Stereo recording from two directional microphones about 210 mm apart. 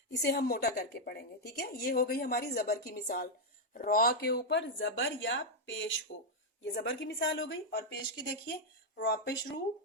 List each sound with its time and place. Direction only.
0.1 s a woman's voice: 50° left (ahead or behind)